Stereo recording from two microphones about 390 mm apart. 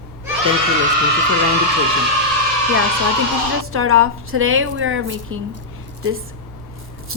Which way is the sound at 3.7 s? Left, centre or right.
Right.